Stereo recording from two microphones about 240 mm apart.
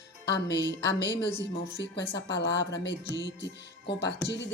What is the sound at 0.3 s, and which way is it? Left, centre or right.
Speech, left.